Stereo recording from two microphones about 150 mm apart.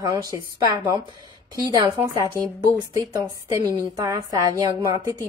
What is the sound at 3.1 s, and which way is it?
A woman's voice, 25° right (ahead or behind).